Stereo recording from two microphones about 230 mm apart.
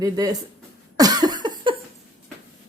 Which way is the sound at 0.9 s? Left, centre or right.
Centre.